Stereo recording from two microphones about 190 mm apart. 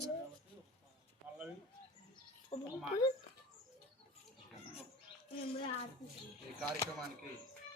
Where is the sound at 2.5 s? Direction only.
30° left (ahead or behind).